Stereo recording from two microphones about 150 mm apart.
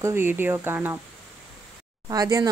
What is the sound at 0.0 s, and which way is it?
Speech, 15° right (ahead or behind).